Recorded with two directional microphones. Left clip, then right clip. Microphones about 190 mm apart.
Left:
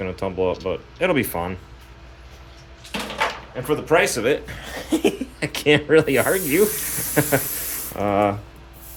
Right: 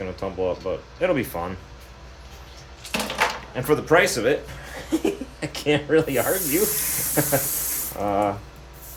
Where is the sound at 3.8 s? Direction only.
5° left (ahead or behind).